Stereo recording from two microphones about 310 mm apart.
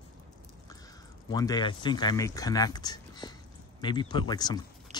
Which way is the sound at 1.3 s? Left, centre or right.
Centre.